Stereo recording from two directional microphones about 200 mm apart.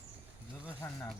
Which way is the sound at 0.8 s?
10° left (ahead or behind).